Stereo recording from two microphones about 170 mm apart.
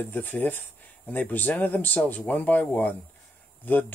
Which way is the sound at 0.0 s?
10° left (ahead or behind).